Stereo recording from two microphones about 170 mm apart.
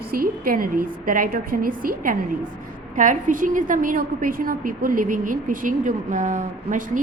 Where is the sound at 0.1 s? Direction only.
60° right (ahead or behind).